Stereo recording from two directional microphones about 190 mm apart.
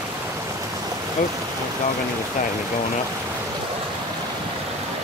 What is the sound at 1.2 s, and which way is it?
Speech, 45° left (ahead or behind).